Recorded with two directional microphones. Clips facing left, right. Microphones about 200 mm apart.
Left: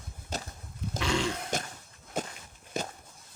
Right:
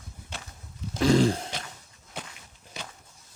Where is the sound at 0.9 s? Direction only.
35° right (ahead or behind).